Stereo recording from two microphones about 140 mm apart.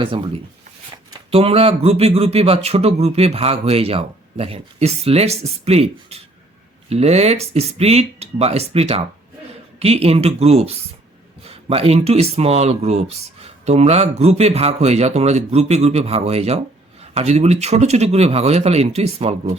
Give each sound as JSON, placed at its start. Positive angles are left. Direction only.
{"t": 0.0, "sound": "speech", "side_deg": -40}
{"t": 1.3, "sound": "speech", "side_deg": -45}